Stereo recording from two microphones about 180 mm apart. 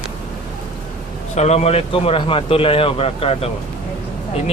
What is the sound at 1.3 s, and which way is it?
Speech, 40° left (ahead or behind).